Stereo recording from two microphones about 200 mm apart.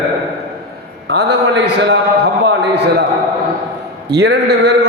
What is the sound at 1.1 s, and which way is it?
A man's voice, 55° right (ahead or behind).